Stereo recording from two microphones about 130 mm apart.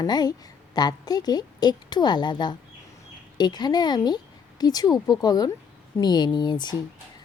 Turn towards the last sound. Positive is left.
turn(degrees=35)  # may be behind; listen again after turning